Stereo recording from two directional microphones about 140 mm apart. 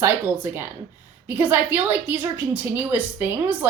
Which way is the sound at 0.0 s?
20° right (ahead or behind).